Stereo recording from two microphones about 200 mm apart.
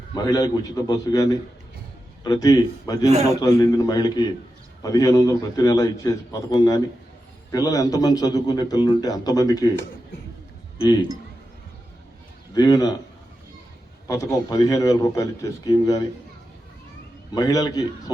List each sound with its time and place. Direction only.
0.1 s a man's voice: 20° left (ahead or behind)
10.8 s a man's voice: 20° left (ahead or behind)
12.5 s a man's voice: 20° left (ahead or behind)
14.1 s a man's voice: 15° left (ahead or behind)
17.3 s a man's voice: 20° left (ahead or behind)